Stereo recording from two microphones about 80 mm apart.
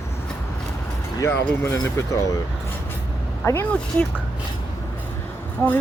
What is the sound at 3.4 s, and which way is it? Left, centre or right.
Speech, left.